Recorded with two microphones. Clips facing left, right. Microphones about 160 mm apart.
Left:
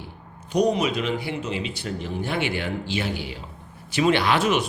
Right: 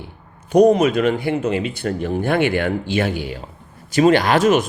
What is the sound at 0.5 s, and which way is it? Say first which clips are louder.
Speech: right 9 dB; 50° right (ahead or behind).